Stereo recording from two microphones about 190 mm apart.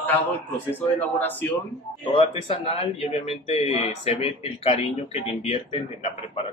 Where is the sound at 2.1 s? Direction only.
30° left (ahead or behind).